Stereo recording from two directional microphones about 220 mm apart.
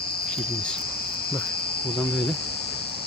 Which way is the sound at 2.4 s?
45° left (ahead or behind).